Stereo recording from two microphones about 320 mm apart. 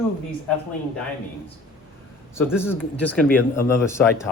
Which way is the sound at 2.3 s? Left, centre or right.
Centre.